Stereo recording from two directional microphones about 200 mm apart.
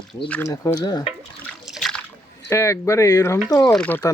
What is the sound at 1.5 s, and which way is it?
Water, centre (ahead or behind).